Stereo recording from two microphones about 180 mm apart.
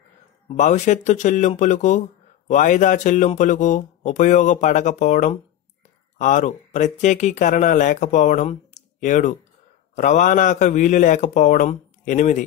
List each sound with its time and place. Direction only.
0.5 s speech: 40° left (ahead or behind)